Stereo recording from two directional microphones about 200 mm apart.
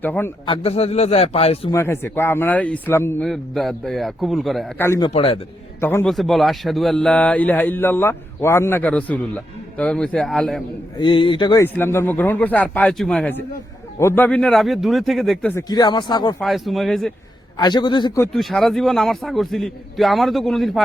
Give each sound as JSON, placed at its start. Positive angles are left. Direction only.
{"t": 0.0, "sound": "a man's voice", "side_deg": 10}
{"t": 0.4, "sound": "a man's voice", "side_deg": 25}
{"t": 1.7, "sound": "a man's voice", "side_deg": 10}
{"t": 3.2, "sound": "a man's voice", "side_deg": 0}
{"t": 4.8, "sound": "a man's voice", "side_deg": 15}
{"t": 5.1, "sound": "a man's voice", "side_deg": 30}
{"t": 5.8, "sound": "a man's voice", "side_deg": 10}
{"t": 11.0, "sound": "a man's voice", "side_deg": 25}
{"t": 15.7, "sound": "a man's voice", "side_deg": 20}
{"t": 16.4, "sound": "a man's voice", "side_deg": 0}
{"t": 17.6, "sound": "a man's voice", "side_deg": 20}
{"t": 18.3, "sound": "a man's voice", "side_deg": 0}